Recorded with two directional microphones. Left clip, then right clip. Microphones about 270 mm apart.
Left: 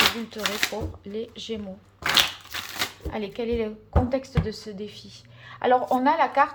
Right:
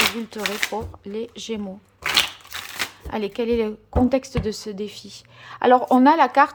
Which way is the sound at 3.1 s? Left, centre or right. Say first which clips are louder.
Right 8 dB; centre.